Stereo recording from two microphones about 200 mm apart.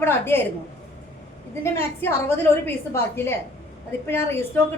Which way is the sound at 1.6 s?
10° left (ahead or behind).